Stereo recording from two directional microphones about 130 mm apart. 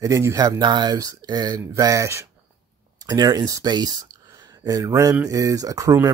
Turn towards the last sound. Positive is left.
turn(degrees=-25)  # may be behind; listen again after turning